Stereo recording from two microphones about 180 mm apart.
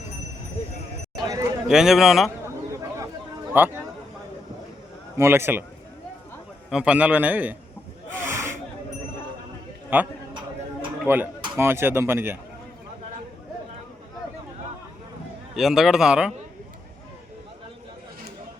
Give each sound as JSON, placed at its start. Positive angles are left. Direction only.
{"t": 1.3, "sound": "speech", "side_deg": -20}
{"t": 1.6, "sound": "speech", "side_deg": -5}
{"t": 3.5, "sound": "a man's voice", "side_deg": -10}
{"t": 5.1, "sound": "a man's voice", "side_deg": -15}
{"t": 6.7, "sound": "a man's voice", "side_deg": -5}
{"t": 8.2, "sound": "a sound", "side_deg": -15}
{"t": 9.9, "sound": "a man's voice", "side_deg": -10}
{"t": 15.5, "sound": "speech", "side_deg": 0}